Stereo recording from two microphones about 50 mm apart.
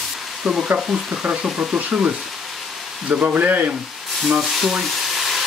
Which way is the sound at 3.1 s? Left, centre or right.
Right.